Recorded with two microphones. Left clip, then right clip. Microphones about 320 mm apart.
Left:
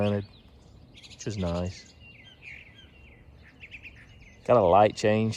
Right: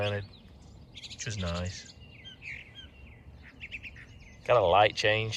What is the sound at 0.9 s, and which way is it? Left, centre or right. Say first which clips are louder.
Bird: right 5 dB; centre.